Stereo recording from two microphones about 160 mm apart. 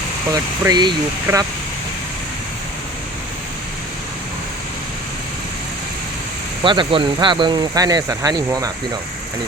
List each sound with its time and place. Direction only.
0.6 s speech: 25° right (ahead or behind)
6.6 s speech: 30° right (ahead or behind)